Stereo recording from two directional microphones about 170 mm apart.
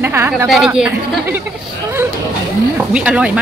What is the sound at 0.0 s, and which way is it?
Speech, 15° right (ahead or behind).